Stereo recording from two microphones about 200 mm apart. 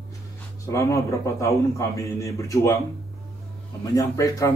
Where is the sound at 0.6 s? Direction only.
15° left (ahead or behind).